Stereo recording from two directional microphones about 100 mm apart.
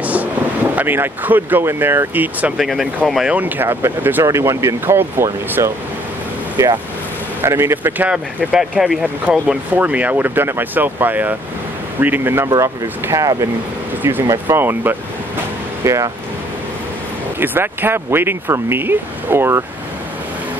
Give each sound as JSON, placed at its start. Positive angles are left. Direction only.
{"t": 0.0, "sound": "wind noise", "side_deg": -15}
{"t": 0.7, "sound": "speech", "side_deg": -20}
{"t": 2.5, "sound": "speech", "side_deg": -5}
{"t": 3.3, "sound": "speech", "side_deg": -20}
{"t": 7.4, "sound": "speech", "side_deg": -25}
{"t": 8.1, "sound": "speech", "side_deg": -10}
{"t": 12.4, "sound": "speech", "side_deg": -30}
{"t": 15.8, "sound": "speech", "side_deg": -30}
{"t": 17.4, "sound": "speech", "side_deg": -20}